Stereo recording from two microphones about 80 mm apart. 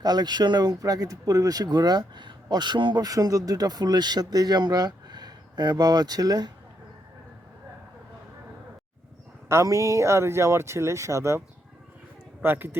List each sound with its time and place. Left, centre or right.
0.0 s speech: right
9.5 s speech: right
12.4 s speech: right